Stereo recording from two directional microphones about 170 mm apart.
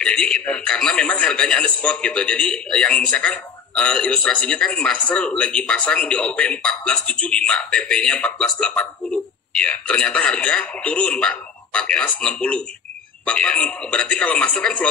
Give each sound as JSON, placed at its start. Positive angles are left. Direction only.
{"t": 0.0, "sound": "a man's voice", "side_deg": 5}